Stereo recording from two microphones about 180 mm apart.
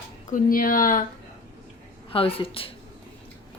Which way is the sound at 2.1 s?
30° left (ahead or behind).